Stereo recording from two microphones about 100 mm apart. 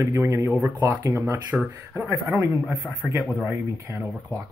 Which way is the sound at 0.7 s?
30° right (ahead or behind).